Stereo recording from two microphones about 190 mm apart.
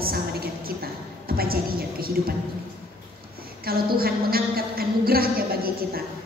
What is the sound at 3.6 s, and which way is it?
A woman's voice, 50° right (ahead or behind).